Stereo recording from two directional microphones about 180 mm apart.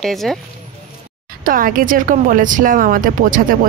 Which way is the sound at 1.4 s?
50° right (ahead or behind).